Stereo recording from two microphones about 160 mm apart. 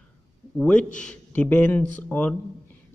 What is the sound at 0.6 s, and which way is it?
Speech, 5° left (ahead or behind).